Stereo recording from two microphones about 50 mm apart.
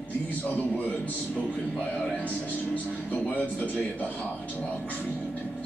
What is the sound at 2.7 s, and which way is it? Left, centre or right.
Speech, left.